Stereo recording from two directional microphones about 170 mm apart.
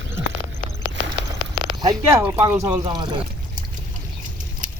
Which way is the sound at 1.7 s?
20° right (ahead or behind).